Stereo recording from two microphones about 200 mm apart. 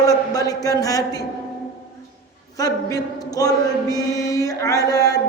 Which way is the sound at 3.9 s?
15° left (ahead or behind).